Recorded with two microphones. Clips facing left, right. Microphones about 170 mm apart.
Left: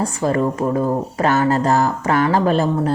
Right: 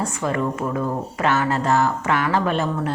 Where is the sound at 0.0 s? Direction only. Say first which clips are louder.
Left 5 dB; 35° left (ahead or behind).